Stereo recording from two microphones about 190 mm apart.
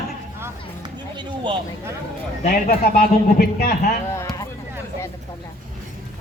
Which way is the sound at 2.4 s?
55° left (ahead or behind).